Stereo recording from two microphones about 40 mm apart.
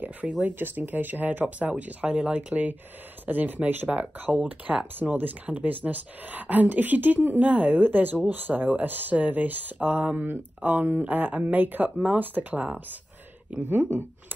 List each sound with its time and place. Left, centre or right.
0.0 s speech: right
0.6 s a woman's voice: right
2.3 s a woman's voice: right
13.7 s speech: right